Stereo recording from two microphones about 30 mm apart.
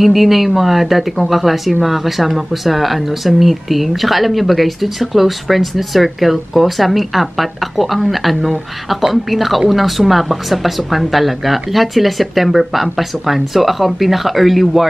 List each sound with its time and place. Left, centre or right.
0.0 s speech: centre